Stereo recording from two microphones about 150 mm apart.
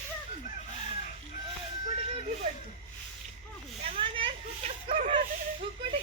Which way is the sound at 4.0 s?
35° right (ahead or behind).